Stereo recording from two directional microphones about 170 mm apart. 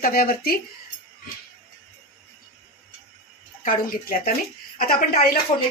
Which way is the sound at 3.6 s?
60° left (ahead or behind).